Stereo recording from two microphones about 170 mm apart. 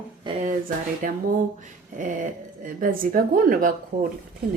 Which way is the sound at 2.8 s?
55° right (ahead or behind).